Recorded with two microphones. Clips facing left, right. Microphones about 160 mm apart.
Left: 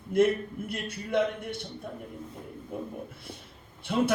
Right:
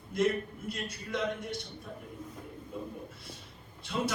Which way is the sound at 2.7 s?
55° left (ahead or behind).